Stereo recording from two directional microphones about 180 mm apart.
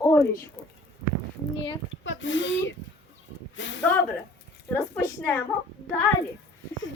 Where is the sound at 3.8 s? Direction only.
10° left (ahead or behind).